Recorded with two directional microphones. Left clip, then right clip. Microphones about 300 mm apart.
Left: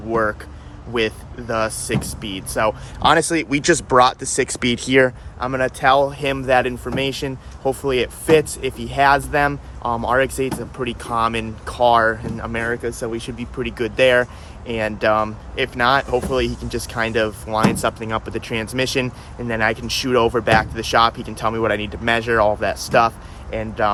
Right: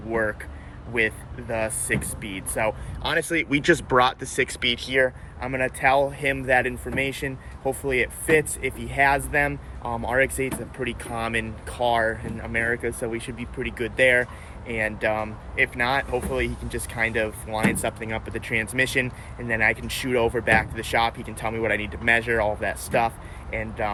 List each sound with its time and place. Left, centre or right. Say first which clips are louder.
1.5 s speech: left 4 dB; centre
3.3 s speech: left 3 dB; centre
4.4 s speech: left 3 dB; centre
5.6 s speech: left 5 dB; centre